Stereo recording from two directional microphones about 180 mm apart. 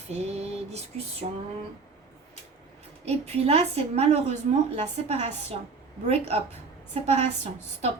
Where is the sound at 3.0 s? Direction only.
35° right (ahead or behind).